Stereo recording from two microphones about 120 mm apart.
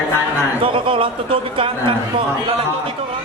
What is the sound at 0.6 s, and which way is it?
A man's voice, 45° right (ahead or behind).